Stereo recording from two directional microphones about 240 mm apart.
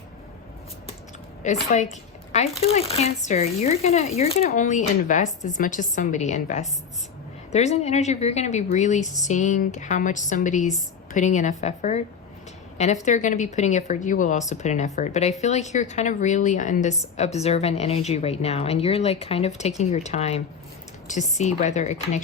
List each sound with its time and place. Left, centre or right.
1.4 s a woman's voice: left